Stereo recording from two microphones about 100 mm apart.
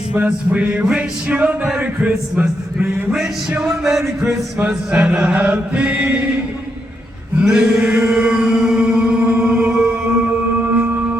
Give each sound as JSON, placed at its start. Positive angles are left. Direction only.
{"t": 0.1, "sound": "music", "side_deg": -15}
{"t": 7.4, "sound": "music", "side_deg": -10}